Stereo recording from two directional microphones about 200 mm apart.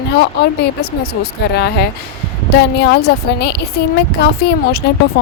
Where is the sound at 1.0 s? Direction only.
55° left (ahead or behind).